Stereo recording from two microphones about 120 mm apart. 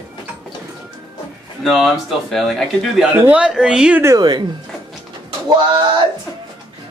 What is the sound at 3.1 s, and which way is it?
Speech, 10° right (ahead or behind).